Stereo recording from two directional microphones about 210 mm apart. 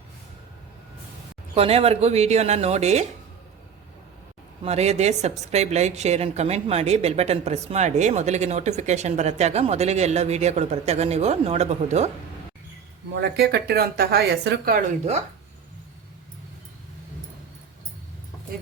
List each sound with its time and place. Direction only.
1.5 s a woman's voice: 30° right (ahead or behind)
4.6 s a woman's voice: 30° right (ahead or behind)
13.1 s speech: 55° right (ahead or behind); by 15.2 s 35° right (ahead or behind)